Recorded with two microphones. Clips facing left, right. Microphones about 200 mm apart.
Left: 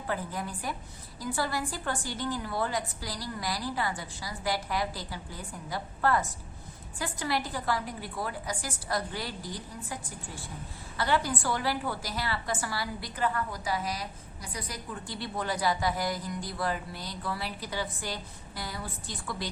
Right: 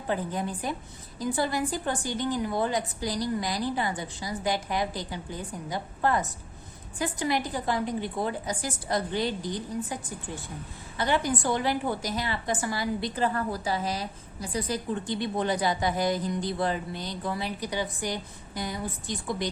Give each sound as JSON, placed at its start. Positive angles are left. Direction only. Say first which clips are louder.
{"t": 0.1, "sound": "a woman's voice", "louder": "right 5 dB", "side_deg": -20}